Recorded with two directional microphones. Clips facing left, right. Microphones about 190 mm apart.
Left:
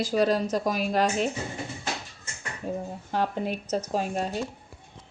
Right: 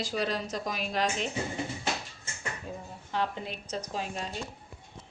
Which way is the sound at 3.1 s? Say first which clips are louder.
Left 5 dB; 45° left (ahead or behind).